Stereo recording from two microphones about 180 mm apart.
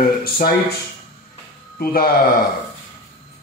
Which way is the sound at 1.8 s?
55° left (ahead or behind).